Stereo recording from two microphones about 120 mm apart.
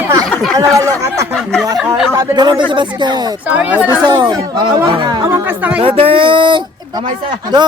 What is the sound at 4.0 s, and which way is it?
Speech, 35° right (ahead or behind).